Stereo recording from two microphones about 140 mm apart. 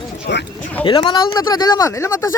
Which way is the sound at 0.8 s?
35° left (ahead or behind).